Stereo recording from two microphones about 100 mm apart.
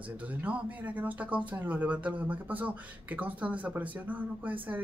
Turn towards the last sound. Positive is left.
turn(degrees=-15)  # may be behind; listen again after turning